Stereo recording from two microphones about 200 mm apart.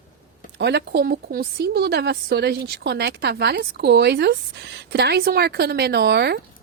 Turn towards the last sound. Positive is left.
turn(degrees=-55)  # may be behind; listen again after turning